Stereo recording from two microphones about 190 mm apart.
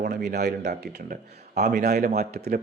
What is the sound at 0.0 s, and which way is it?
Speech, 55° right (ahead or behind).